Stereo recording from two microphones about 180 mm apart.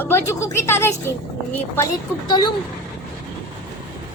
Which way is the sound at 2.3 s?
25° left (ahead or behind).